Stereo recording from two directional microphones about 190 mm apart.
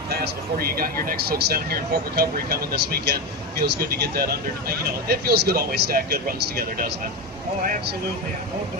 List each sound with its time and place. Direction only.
0.1 s speech: 55° right (ahead or behind)